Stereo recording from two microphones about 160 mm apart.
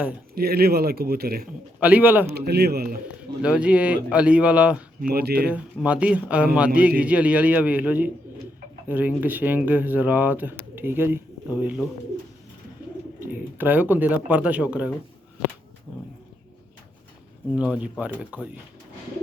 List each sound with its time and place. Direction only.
0.3 s speech: 75° right (ahead or behind)
1.8 s speech: 10° right (ahead or behind)
2.3 s a man's voice: 90° right; by 3.0 s 75° right (ahead or behind)
3.4 s speech: 5° right (ahead or behind)
5.0 s speech: 75° right (ahead or behind)
5.5 s speech: 10° right (ahead or behind)
13.1 s speech: 15° right (ahead or behind)
15.9 s a sound: 25° left (ahead or behind)
17.5 s speech: 10° right (ahead or behind)